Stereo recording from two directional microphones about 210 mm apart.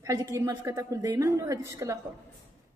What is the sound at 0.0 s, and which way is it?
A woman's voice, 15° right (ahead or behind).